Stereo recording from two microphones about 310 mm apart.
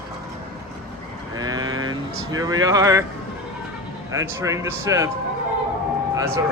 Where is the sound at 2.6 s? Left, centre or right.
Centre.